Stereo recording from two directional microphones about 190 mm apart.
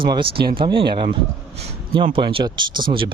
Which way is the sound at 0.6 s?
30° right (ahead or behind).